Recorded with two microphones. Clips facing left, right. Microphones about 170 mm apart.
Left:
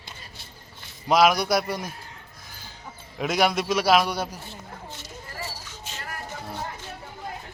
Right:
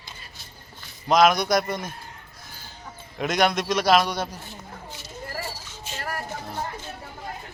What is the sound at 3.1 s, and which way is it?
A man's voice, 5° left (ahead or behind).